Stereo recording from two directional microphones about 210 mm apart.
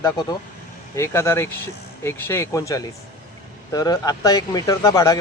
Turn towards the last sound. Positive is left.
turn(degrees=15)  # may be behind; listen again after turning